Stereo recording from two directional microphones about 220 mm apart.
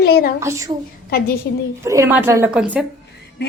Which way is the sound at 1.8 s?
15° right (ahead or behind).